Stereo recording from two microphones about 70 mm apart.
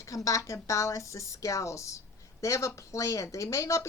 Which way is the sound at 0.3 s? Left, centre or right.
Left.